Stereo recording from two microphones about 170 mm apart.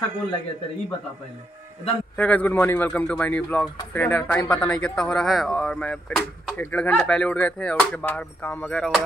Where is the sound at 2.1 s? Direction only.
10° left (ahead or behind).